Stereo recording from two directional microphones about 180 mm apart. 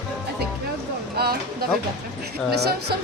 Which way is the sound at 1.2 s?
60° right (ahead or behind).